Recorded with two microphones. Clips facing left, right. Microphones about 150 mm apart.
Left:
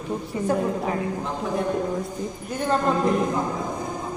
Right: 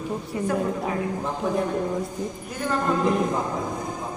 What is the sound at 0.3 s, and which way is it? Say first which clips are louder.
Speech: even; 25° left (ahead or behind).